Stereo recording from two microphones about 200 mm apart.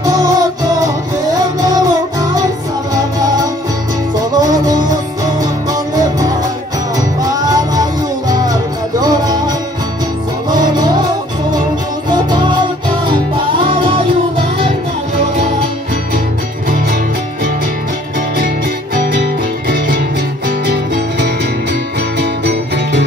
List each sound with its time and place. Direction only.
0.0 s music: 15° right (ahead or behind)
10.5 s music: 20° right (ahead or behind)
12.1 s music: 20° right (ahead or behind)